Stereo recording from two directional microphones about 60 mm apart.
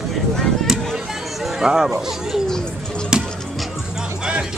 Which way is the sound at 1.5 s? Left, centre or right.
Centre.